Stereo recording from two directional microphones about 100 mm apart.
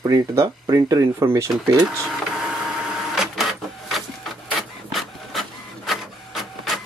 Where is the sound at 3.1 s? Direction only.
Centre (ahead or behind).